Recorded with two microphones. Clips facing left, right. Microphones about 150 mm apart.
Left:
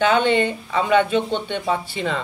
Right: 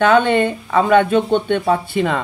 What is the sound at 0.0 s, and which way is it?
Speech, 50° right (ahead or behind).